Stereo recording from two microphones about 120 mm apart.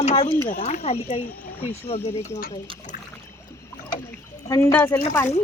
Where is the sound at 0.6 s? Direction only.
70° left (ahead or behind).